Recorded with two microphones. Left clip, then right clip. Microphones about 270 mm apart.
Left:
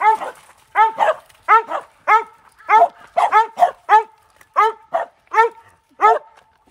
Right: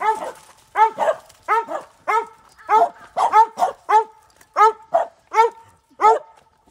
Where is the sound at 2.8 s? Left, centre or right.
Left.